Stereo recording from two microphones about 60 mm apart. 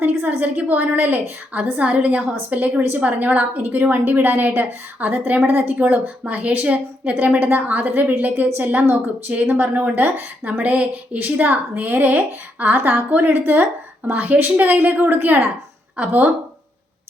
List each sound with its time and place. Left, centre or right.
0.0 s a woman's voice: right
10.6 s a woman's voice: right